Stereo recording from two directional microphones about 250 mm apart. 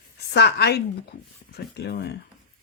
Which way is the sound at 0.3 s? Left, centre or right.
Left.